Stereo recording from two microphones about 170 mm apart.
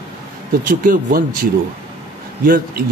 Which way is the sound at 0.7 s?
55° right (ahead or behind).